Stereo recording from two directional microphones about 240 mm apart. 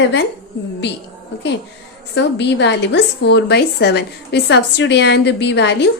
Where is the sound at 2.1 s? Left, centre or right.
Left.